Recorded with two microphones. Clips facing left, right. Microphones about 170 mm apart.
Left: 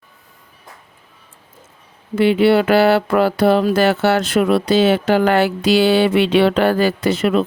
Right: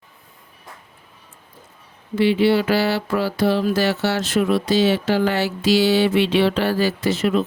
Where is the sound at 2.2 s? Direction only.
60° left (ahead or behind).